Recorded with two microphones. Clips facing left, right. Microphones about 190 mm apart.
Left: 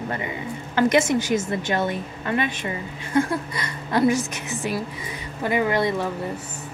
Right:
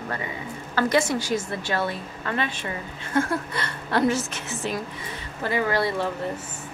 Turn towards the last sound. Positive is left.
turn(degrees=20)  # may be behind; listen again after turning